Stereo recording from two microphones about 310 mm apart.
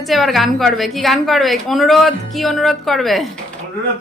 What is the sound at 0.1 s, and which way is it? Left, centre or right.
A woman's voice, centre.